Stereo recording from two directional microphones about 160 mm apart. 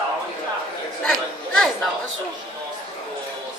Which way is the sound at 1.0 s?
5° left (ahead or behind).